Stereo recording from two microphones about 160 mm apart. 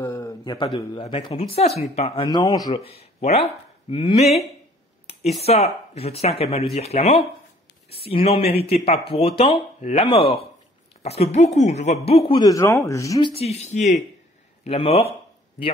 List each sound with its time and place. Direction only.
0.0 s a sound: 15° left (ahead or behind)
0.7 s speech: 30° left (ahead or behind)
2.2 s speech: 25° left (ahead or behind)
2.7 s speech: 40° left (ahead or behind)
12.4 s speech: 20° left (ahead or behind)
13.3 s speech: 40° left (ahead or behind)